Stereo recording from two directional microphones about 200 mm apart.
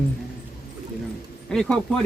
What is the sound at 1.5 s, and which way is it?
Speech, 5° left (ahead or behind).